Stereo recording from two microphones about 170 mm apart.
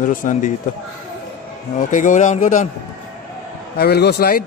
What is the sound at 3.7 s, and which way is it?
Speech, 70° left (ahead or behind).